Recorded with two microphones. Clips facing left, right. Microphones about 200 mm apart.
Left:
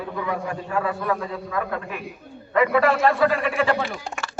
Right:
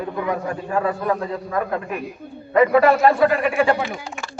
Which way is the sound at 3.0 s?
25° right (ahead or behind).